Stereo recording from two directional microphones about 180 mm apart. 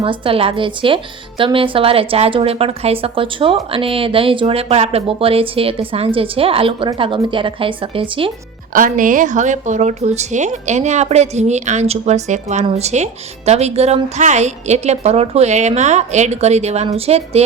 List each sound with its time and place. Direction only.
0.0 s a woman's voice: 30° right (ahead or behind)
8.7 s a woman's voice: 50° right (ahead or behind)